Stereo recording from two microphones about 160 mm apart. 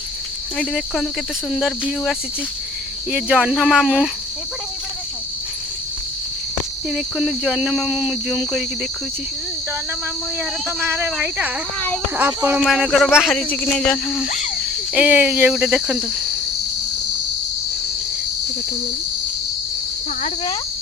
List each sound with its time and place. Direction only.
0.5 s speech: centre (ahead or behind)
6.9 s speech: 5° right (ahead or behind)
10.8 s speech: 15° right (ahead or behind); by 14.3 s centre (ahead or behind)
14.3 s speech: 50° left (ahead or behind)
14.9 s speech: 10° right (ahead or behind)